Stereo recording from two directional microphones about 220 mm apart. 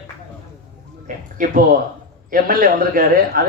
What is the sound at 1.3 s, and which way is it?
Speech, 40° right (ahead or behind).